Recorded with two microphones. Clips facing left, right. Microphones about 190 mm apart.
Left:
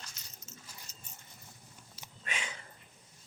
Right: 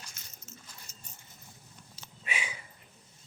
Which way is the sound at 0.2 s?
50° right (ahead or behind).